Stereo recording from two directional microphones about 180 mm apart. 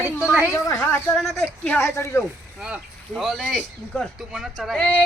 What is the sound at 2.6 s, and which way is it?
Speech, 5° right (ahead or behind).